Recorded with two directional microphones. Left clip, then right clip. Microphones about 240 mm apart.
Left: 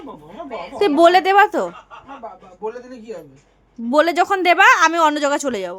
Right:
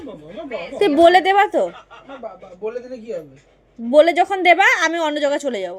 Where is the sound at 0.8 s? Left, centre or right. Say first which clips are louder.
Right 1 dB; centre.